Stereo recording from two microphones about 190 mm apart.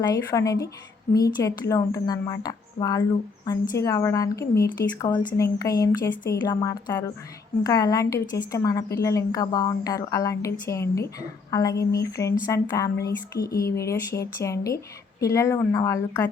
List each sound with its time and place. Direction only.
0.0 s a woman's voice: 20° left (ahead or behind)